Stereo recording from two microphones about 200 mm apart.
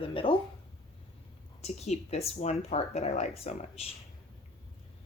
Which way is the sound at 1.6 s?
30° left (ahead or behind).